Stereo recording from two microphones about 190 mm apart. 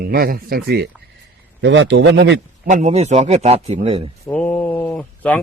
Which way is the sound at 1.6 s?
70° right (ahead or behind).